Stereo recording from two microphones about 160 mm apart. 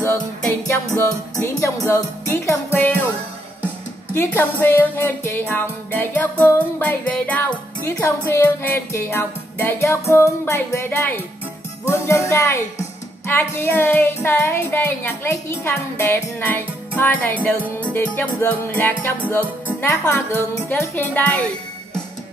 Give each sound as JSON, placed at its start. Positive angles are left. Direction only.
{"t": 1.3, "sound": "music", "side_deg": 20}
{"t": 4.1, "sound": "music", "side_deg": 15}